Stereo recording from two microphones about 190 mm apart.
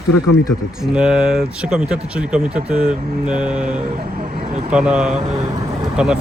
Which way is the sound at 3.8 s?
50° right (ahead or behind).